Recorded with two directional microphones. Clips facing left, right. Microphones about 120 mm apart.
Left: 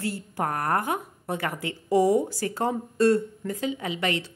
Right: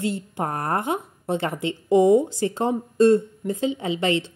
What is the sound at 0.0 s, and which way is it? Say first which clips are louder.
A woman's voice: right 3 dB; 20° right (ahead or behind).